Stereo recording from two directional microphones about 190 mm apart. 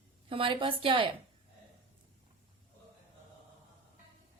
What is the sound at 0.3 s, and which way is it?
Speech, 25° right (ahead or behind).